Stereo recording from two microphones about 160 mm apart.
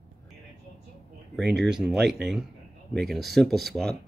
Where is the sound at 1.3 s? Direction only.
Centre (ahead or behind).